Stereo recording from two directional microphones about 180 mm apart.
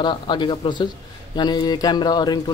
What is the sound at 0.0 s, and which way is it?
A man's voice, 25° left (ahead or behind).